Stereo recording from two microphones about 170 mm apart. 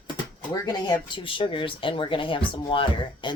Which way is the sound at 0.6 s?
25° left (ahead or behind).